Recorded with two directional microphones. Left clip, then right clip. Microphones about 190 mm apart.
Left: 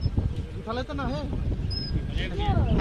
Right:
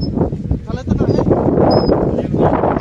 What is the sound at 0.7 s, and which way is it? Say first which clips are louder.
Speech: right 8 dB; 55° left (ahead or behind).